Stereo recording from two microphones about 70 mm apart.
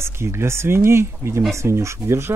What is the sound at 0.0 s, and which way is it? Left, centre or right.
Speech, right.